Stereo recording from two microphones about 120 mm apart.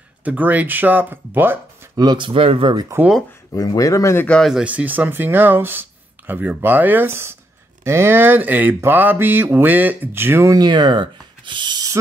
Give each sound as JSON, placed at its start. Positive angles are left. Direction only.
{"t": 0.2, "sound": "speech", "side_deg": -15}
{"t": 2.0, "sound": "speech", "side_deg": -40}
{"t": 3.0, "sound": "speech", "side_deg": -20}
{"t": 3.5, "sound": "speech", "side_deg": 30}
{"t": 4.3, "sound": "speech", "side_deg": 0}
{"t": 10.6, "sound": "speech", "side_deg": -40}